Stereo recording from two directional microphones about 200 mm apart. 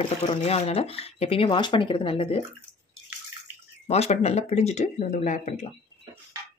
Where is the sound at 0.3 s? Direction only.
30° left (ahead or behind).